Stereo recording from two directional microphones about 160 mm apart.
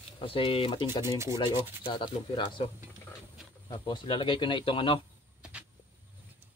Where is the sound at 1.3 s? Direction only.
25° left (ahead or behind).